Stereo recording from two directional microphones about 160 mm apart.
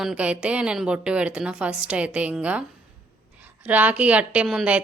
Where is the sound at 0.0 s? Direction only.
5° right (ahead or behind).